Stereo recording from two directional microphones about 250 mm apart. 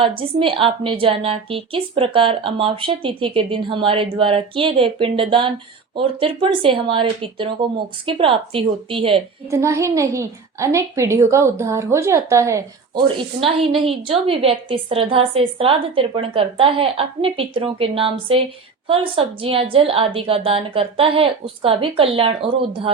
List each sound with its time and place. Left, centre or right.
0.0 s a child's voice: right